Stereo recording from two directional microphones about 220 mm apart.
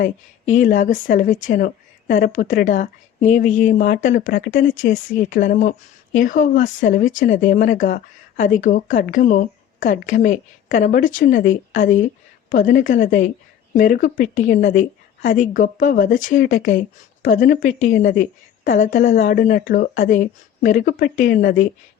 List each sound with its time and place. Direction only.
0.0 s speech: 35° left (ahead or behind)